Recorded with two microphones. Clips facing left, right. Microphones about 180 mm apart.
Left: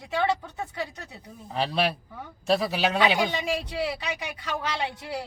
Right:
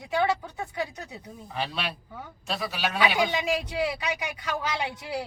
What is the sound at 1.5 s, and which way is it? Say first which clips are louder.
Speech: left 6 dB; 35° left (ahead or behind).